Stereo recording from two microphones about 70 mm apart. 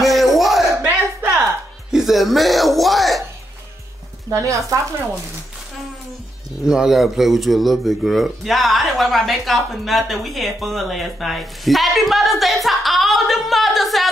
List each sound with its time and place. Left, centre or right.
0.0 s a sound: centre
1.2 s music: right
1.9 s speech: centre
4.3 s speech: right
6.6 s speech: centre